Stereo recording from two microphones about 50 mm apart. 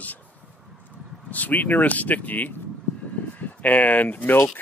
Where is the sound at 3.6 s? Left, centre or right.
Left.